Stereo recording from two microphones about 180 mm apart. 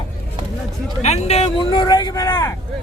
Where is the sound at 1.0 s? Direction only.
35° left (ahead or behind).